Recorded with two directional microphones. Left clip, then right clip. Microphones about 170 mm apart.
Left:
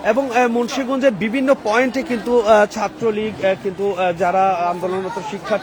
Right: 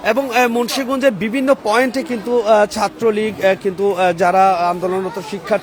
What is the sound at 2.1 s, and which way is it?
Speech, centre (ahead or behind).